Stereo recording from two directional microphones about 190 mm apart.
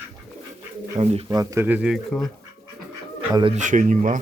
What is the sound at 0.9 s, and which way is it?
Bird, 30° right (ahead or behind).